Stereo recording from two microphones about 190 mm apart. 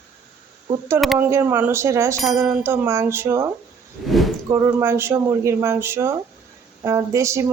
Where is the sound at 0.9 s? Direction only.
5° right (ahead or behind).